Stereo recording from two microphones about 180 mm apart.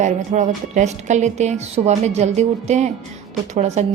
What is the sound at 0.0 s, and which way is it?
A woman's voice, 40° right (ahead or behind).